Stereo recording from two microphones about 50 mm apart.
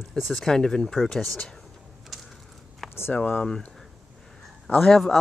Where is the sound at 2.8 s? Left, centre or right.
Left.